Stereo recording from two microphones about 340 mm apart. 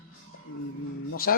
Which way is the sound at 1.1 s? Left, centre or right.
Left.